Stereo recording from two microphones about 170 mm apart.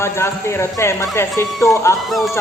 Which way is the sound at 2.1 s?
Centre (ahead or behind).